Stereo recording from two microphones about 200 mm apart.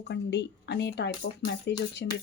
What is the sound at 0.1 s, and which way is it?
A woman's voice, 60° left (ahead or behind).